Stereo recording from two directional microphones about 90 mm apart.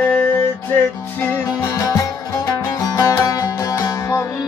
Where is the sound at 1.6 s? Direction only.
35° left (ahead or behind).